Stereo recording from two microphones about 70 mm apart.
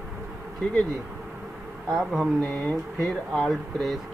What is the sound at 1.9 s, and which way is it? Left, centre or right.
Speech, centre.